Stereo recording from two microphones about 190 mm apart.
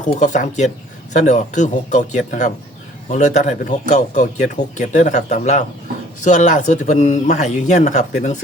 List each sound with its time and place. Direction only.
0.0 s speech: 40° left (ahead or behind)